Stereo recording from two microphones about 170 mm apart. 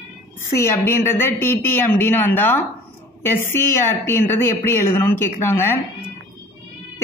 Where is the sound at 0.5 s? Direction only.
15° left (ahead or behind).